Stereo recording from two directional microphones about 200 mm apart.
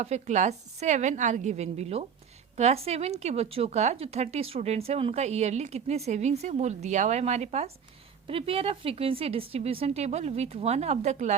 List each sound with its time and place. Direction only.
0.0 s speech: 35° right (ahead or behind)